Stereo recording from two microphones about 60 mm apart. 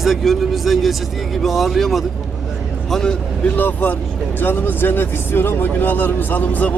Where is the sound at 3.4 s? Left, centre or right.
Left.